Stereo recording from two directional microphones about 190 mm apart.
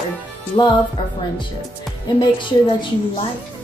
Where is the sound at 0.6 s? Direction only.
30° left (ahead or behind).